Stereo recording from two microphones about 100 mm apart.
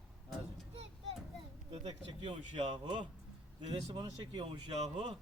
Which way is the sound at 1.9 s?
60° right (ahead or behind).